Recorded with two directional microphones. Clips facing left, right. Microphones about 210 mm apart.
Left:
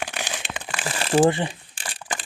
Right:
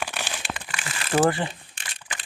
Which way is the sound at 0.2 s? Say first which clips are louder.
Left 1 dB; 15° left (ahead or behind).